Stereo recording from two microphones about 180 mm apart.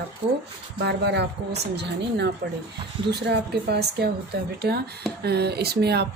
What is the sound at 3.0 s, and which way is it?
Speech, 65° right (ahead or behind).